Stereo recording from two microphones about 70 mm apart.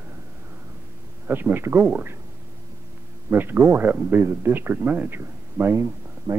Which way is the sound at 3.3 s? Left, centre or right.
Right.